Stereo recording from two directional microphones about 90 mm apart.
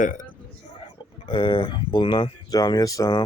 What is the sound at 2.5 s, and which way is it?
Speech, 45° left (ahead or behind).